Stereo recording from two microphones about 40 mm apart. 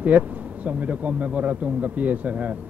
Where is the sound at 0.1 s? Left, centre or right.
Right.